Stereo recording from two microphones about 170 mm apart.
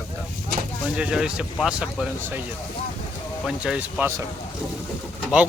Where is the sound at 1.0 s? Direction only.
5° right (ahead or behind).